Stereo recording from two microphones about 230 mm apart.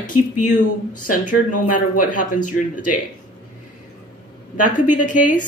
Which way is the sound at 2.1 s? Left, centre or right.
Left.